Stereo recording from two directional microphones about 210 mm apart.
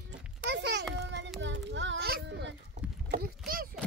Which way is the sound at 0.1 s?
55° right (ahead or behind).